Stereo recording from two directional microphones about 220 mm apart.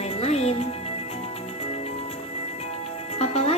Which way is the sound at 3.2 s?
30° left (ahead or behind).